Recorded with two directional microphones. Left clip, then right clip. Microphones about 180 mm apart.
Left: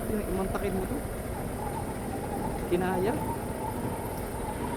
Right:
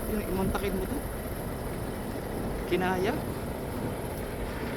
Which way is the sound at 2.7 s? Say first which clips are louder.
Right 1 dB; 60° right (ahead or behind).